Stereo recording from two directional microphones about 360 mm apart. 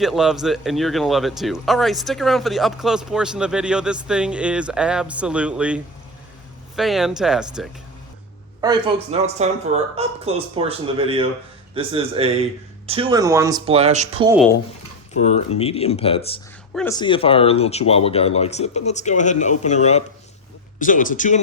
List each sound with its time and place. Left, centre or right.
0.0 s a man's voice: centre
8.6 s speech: centre
15.1 s speech: centre